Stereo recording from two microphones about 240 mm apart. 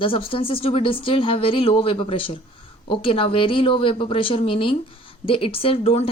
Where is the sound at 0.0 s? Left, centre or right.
Left.